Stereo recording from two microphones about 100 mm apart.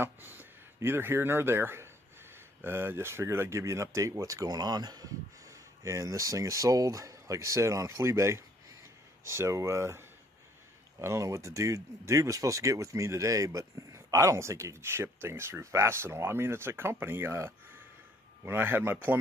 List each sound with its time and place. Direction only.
0.0 s speech: 20° right (ahead or behind)